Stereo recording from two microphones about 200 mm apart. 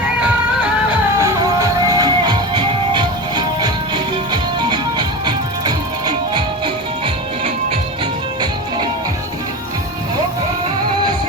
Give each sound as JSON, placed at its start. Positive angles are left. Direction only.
{"t": 1.2, "sound": "music", "side_deg": -20}